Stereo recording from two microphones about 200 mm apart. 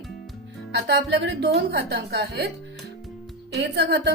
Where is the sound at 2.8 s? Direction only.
Centre (ahead or behind).